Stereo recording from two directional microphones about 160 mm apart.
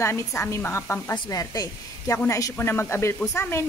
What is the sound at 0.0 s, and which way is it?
Speech, 15° left (ahead or behind).